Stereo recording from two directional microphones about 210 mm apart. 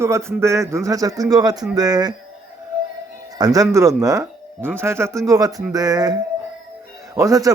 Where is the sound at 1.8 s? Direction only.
20° right (ahead or behind).